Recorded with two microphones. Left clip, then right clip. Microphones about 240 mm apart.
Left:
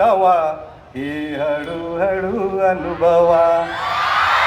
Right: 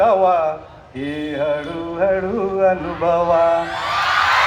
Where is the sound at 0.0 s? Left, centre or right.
Left.